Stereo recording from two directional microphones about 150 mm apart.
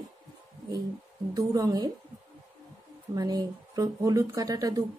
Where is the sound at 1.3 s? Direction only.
25° right (ahead or behind).